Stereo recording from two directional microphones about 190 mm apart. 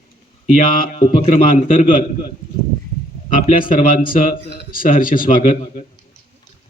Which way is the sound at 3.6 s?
45° left (ahead or behind).